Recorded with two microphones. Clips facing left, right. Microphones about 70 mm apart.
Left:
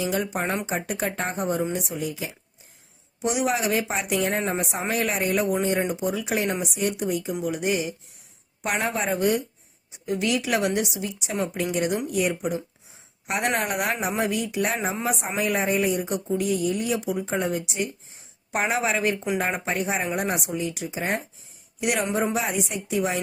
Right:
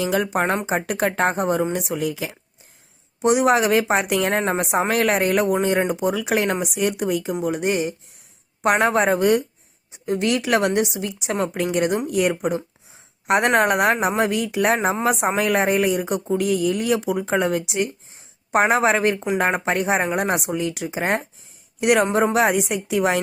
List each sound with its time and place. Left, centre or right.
0.0 s speech: right
3.2 s speech: right
7.4 s speech: right
15.4 s speech: right
18.5 s speech: right